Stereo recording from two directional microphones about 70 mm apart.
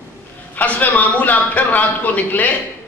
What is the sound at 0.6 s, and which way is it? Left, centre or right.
A man's voice, left.